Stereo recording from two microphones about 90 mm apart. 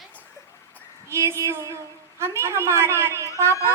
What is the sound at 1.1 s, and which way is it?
Child singing, 30° right (ahead or behind).